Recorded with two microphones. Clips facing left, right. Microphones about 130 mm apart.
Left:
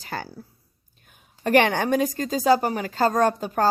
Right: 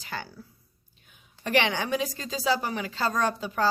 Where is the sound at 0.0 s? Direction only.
40° left (ahead or behind).